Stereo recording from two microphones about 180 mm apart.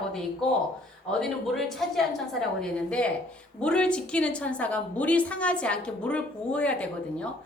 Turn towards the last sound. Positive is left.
turn(degrees=5)  # may be behind; listen again after turning